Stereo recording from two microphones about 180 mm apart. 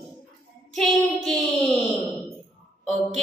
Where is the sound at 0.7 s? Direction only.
Centre (ahead or behind).